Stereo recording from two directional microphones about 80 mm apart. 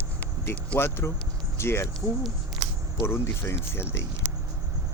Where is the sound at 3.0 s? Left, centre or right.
Left.